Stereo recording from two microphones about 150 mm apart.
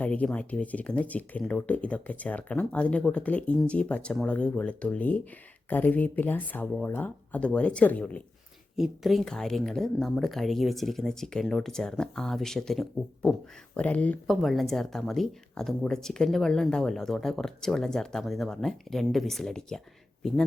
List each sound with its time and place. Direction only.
0.0 s speech: 10° left (ahead or behind)
8.7 s speech: centre (ahead or behind)